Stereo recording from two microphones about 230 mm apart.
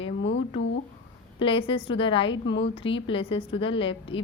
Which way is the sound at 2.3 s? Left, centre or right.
Left.